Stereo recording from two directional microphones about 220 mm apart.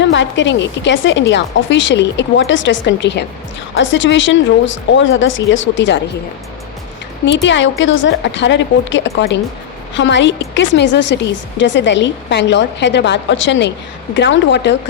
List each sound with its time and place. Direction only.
0.0 s a woman's voice: 55° left (ahead or behind)
7.4 s a woman's voice: 55° left (ahead or behind)